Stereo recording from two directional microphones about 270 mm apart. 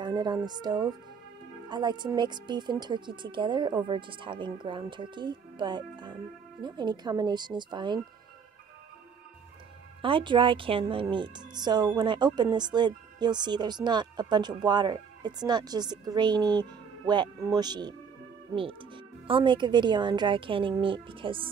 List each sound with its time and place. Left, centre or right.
0.0 s music: centre
1.7 s a woman's voice: centre
10.0 s a woman's voice: centre